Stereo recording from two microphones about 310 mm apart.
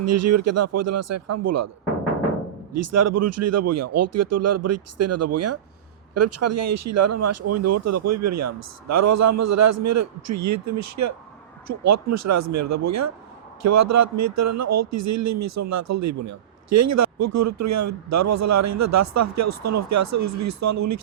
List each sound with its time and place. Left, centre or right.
0.0 s speech: right
2.7 s speech: right